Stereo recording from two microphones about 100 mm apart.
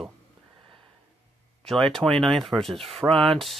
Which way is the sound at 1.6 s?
5° left (ahead or behind).